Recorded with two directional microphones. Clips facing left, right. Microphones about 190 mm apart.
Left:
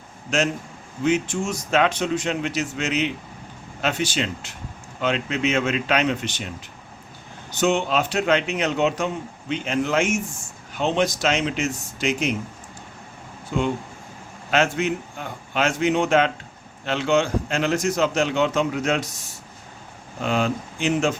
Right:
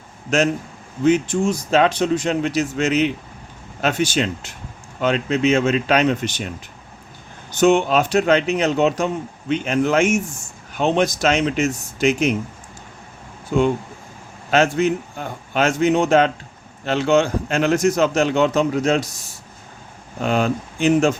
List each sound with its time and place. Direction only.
1.0 s a man's voice: 35° right (ahead or behind)
7.6 s speech: 45° right (ahead or behind)
9.5 s a man's voice: 50° right (ahead or behind)
14.5 s a man's voice: 40° right (ahead or behind)
20.2 s a man's voice: 45° right (ahead or behind)